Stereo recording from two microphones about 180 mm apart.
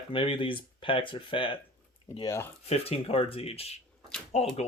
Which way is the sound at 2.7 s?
35° left (ahead or behind).